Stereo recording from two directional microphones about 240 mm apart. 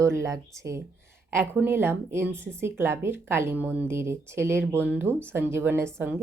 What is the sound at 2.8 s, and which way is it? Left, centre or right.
Speech, centre.